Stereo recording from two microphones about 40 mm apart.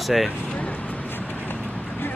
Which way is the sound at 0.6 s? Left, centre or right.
Left.